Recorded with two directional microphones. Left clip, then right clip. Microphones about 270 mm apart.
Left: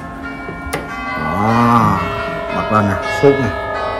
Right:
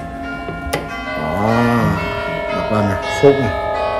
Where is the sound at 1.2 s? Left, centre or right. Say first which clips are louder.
Left 1 dB; left.